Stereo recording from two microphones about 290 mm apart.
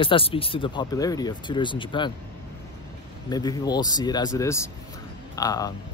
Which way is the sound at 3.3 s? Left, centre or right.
Centre.